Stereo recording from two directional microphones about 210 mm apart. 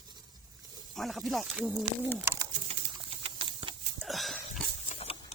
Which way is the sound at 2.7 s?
25° right (ahead or behind).